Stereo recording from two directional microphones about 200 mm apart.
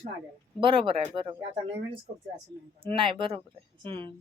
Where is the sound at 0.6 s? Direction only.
25° right (ahead or behind).